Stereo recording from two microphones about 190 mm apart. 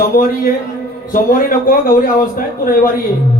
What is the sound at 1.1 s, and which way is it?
Speech, 45° left (ahead or behind).